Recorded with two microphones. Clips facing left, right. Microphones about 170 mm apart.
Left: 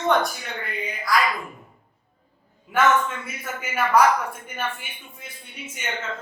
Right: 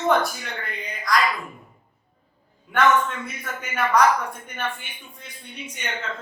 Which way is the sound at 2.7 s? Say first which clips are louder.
Even; 5° left (ahead or behind).